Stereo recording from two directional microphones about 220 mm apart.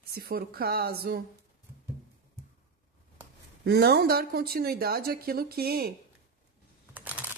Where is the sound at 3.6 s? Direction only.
45° right (ahead or behind).